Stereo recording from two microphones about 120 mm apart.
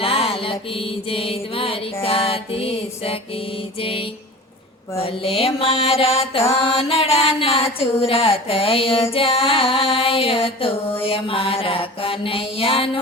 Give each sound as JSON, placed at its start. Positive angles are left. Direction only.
{"t": 0.0, "sound": "mantra", "side_deg": 50}